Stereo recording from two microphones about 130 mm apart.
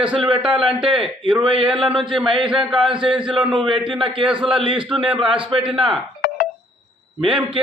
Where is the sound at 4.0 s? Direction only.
40° right (ahead or behind).